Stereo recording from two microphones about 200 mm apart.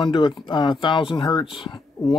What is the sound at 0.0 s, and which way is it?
Speech, 25° left (ahead or behind).